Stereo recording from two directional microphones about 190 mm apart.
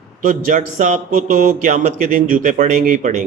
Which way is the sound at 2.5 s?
40° right (ahead or behind).